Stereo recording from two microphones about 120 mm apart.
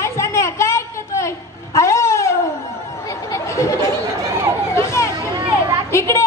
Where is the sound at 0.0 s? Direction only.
25° left (ahead or behind).